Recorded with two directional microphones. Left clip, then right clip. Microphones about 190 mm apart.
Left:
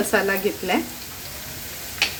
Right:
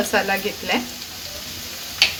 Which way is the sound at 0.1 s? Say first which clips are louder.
Even; 50° left (ahead or behind).